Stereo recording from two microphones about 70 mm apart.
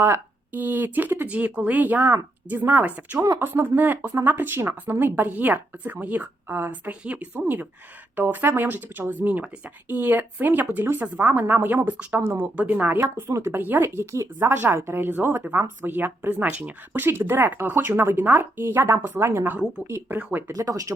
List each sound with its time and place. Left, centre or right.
0.0 s speech: right
12.2 s speech: right
12.5 s speech: right
14.4 s speech: right
16.5 s speech: centre
16.9 s speech: right
20.1 s speech: right
20.5 s speech: right